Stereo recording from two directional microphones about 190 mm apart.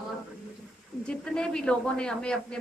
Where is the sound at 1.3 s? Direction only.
5° left (ahead or behind).